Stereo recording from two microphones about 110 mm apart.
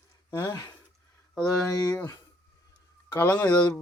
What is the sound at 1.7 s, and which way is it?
Speech, 35° left (ahead or behind).